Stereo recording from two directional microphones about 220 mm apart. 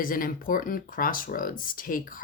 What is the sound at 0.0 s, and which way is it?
Speech, 40° left (ahead or behind).